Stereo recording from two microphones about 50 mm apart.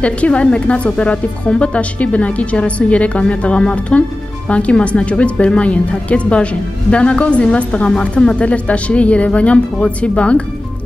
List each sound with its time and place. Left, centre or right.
0.0 s speech: left